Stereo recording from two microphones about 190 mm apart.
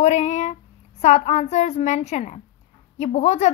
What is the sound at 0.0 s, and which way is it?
A woman's voice, 35° left (ahead or behind).